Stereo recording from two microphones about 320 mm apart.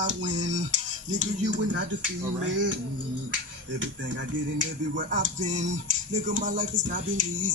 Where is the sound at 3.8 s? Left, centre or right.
Right.